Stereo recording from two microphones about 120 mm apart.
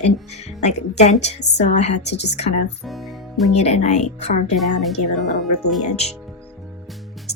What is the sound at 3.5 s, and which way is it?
A woman's voice, 65° left (ahead or behind).